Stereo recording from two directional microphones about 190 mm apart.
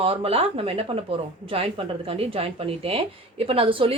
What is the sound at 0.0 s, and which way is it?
Speech, 30° right (ahead or behind).